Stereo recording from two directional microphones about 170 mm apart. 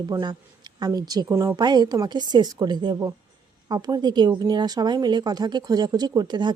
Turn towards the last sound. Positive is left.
turn(degrees=-25)  # may be behind; listen again after turning